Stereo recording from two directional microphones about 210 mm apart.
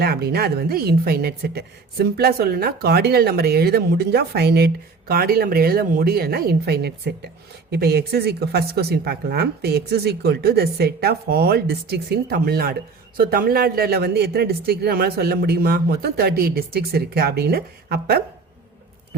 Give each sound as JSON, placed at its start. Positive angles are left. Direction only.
{"t": 0.0, "sound": "a woman's voice", "side_deg": -50}